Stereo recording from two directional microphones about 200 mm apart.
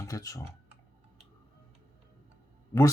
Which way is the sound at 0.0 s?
15° left (ahead or behind).